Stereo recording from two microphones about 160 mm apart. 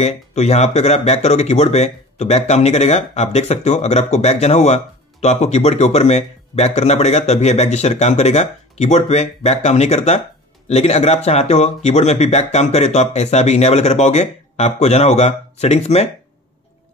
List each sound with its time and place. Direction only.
0.0 s speech: 45° left (ahead or behind)